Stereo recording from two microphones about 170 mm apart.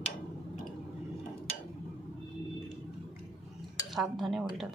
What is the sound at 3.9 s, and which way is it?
Speech, centre (ahead or behind).